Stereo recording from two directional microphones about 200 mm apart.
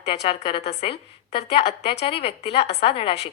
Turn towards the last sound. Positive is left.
turn(degrees=30)  # may be behind; listen again after turning